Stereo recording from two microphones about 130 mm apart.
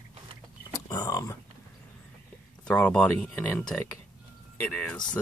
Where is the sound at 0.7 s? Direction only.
30° left (ahead or behind).